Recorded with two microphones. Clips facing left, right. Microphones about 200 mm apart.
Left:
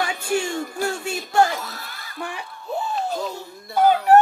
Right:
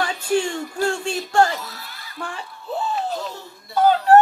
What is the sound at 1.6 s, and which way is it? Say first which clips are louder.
Speech: left 1 dB; 50° left (ahead or behind).